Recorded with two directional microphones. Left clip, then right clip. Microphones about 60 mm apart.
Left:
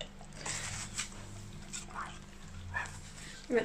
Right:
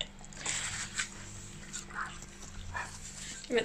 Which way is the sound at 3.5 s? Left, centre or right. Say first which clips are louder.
Even; centre.